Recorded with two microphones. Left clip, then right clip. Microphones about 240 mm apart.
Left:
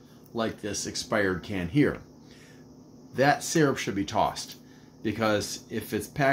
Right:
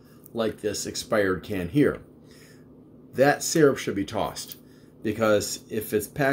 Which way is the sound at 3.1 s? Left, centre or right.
Centre.